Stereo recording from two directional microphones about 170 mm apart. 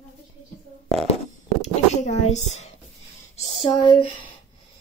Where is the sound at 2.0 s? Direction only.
40° left (ahead or behind).